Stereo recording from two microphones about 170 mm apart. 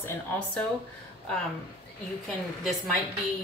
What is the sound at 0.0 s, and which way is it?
Speech, 10° left (ahead or behind).